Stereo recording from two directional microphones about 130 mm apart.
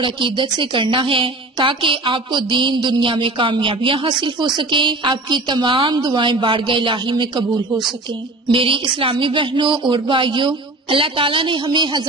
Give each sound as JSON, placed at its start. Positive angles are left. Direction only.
{"t": 0.0, "sound": "a woman's voice", "side_deg": -40}